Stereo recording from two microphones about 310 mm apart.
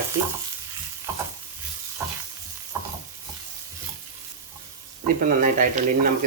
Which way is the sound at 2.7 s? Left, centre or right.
Centre.